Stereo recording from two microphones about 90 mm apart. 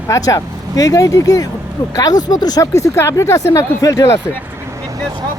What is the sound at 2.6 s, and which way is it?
Speech, 35° left (ahead or behind).